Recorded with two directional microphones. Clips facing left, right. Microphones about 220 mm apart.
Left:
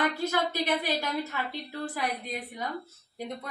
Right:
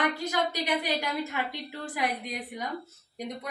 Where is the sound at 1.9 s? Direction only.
15° right (ahead or behind).